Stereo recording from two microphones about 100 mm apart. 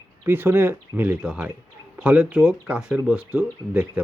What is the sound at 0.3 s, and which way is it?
Speech, 20° right (ahead or behind).